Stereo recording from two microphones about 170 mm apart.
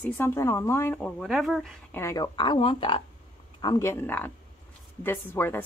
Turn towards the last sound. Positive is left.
turn(degrees=15)  # may be behind; listen again after turning